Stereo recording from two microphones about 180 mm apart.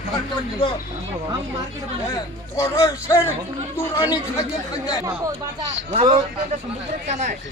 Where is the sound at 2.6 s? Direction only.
20° left (ahead or behind).